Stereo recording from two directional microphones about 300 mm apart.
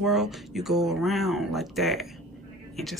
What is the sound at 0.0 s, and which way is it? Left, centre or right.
Speech, centre.